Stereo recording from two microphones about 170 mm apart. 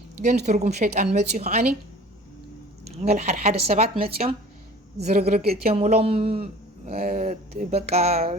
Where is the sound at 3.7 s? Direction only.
45° right (ahead or behind).